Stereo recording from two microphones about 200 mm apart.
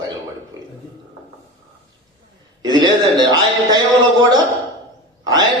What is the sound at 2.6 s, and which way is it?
Speech, 20° right (ahead or behind).